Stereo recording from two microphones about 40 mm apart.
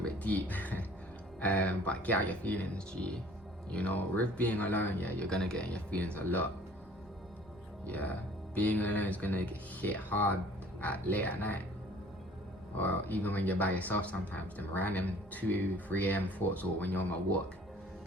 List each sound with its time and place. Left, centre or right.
0.2 s speech: left
2.7 s speech: left
3.7 s speech: left
5.3 s speech: centre
5.9 s speech: left
7.9 s speech: left
12.7 s speech: left